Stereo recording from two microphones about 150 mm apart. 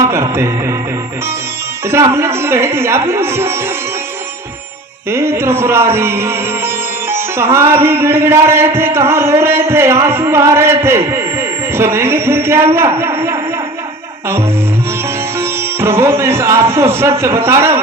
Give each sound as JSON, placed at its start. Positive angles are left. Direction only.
{"t": 0.0, "sound": "speech", "side_deg": -20}
{"t": 1.9, "sound": "speech", "side_deg": -20}
{"t": 5.0, "sound": "speech", "side_deg": -15}
{"t": 13.0, "sound": "a sound", "side_deg": -15}
{"t": 15.4, "sound": "music", "side_deg": -15}
{"t": 16.7, "sound": "speech", "side_deg": -15}